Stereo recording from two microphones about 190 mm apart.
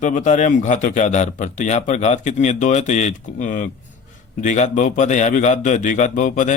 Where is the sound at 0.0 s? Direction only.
40° left (ahead or behind).